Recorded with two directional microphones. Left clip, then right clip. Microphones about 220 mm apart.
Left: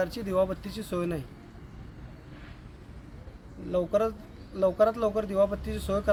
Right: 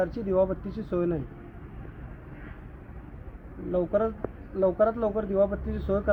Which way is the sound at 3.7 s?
15° left (ahead or behind).